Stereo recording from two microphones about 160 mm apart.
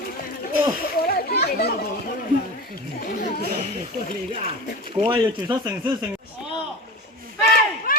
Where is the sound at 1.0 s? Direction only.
75° left (ahead or behind).